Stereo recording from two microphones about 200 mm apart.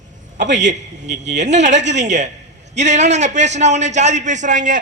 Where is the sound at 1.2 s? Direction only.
60° right (ahead or behind).